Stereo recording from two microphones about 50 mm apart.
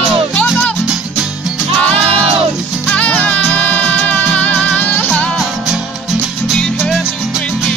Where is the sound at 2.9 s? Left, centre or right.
Left.